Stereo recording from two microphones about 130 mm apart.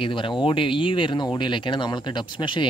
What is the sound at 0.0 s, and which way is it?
Speech, 40° left (ahead or behind).